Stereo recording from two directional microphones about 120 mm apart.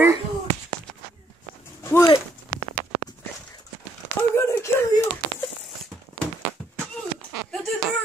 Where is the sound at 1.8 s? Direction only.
20° left (ahead or behind).